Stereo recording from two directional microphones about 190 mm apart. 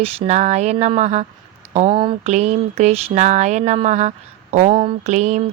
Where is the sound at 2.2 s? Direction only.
35° right (ahead or behind).